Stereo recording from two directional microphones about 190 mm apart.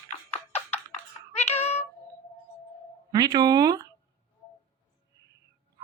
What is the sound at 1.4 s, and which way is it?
Meow, 35° left (ahead or behind).